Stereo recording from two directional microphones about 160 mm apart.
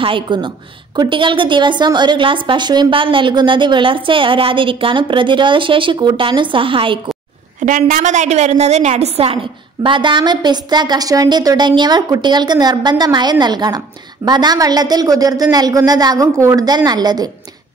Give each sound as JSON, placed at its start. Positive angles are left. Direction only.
{"t": 0.0, "sound": "a woman's voice", "side_deg": -30}
{"t": 7.6, "sound": "a woman's voice", "side_deg": -55}